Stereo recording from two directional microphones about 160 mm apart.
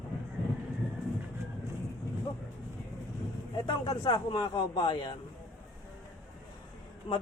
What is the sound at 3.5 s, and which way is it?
Speech, 30° left (ahead or behind).